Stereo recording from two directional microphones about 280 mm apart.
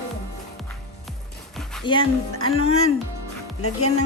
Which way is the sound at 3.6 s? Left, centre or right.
Left.